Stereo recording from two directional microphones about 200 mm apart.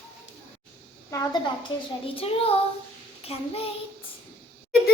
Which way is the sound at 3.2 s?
30° left (ahead or behind).